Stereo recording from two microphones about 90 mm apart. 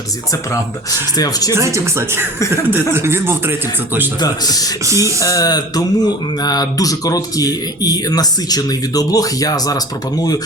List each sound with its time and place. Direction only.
0.5 s speech: 45° left (ahead or behind)
1.5 s speech: 30° right (ahead or behind)
4.2 s speech: 45° left (ahead or behind)
4.9 s speech: 35° right (ahead or behind)
5.2 s speech: 40° left (ahead or behind)